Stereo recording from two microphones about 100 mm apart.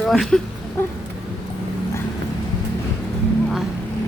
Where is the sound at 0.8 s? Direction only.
25° left (ahead or behind).